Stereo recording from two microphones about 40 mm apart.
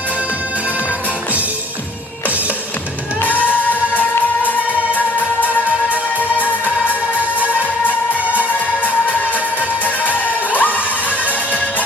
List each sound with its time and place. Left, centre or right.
3.2 s music: left
5.9 s music: right
8.8 s music: left